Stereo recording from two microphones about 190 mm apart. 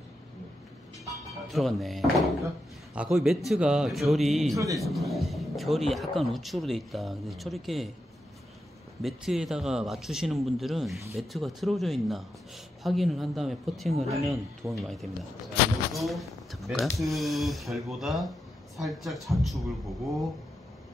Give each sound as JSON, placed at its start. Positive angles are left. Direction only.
{"t": 1.5, "sound": "speech", "side_deg": 0}
{"t": 4.6, "sound": "speech", "side_deg": -15}
{"t": 4.8, "sound": "speech", "side_deg": 0}
{"t": 9.0, "sound": "speech", "side_deg": 0}